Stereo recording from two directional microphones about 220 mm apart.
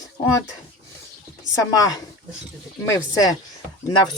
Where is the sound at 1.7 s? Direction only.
15° left (ahead or behind).